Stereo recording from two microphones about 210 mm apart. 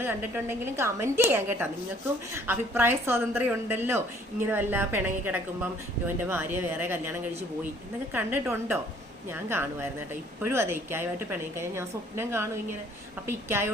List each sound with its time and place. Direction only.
0.0 s a woman's voice: 10° right (ahead or behind)
8.1 s a woman's voice: 10° right (ahead or behind)